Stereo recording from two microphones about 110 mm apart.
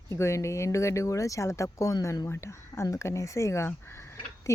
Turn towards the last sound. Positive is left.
turn(degrees=25)  # may be behind; listen again after turning